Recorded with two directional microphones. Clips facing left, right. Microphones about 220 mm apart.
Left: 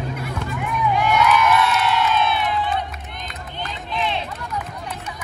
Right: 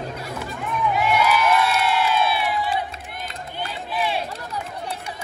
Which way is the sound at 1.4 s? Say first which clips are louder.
Left 1 dB; 30° right (ahead or behind).